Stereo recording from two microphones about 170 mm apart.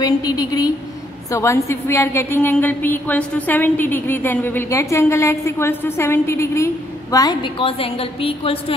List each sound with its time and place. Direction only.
0.0 s a woman's voice: 20° left (ahead or behind)